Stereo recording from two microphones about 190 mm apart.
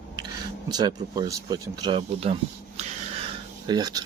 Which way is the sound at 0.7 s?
20° right (ahead or behind).